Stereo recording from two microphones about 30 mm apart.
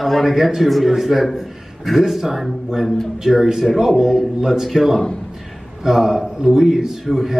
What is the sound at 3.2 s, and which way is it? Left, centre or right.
A man's voice, centre.